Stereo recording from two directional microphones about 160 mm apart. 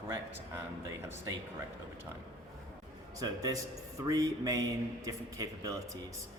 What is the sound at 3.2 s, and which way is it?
A man's voice, 25° right (ahead or behind).